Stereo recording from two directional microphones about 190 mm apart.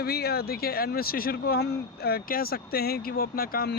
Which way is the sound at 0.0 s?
55° left (ahead or behind).